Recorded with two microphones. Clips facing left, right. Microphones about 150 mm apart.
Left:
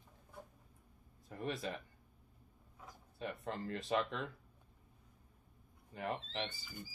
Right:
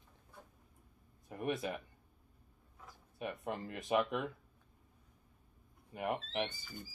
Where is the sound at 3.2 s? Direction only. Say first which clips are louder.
Right 2 dB; 15° right (ahead or behind).